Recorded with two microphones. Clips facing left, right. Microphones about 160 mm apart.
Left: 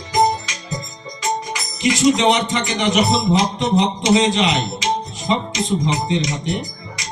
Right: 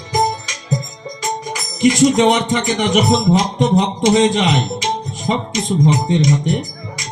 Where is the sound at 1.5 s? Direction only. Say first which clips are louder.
Right 5 dB; 45° right (ahead or behind).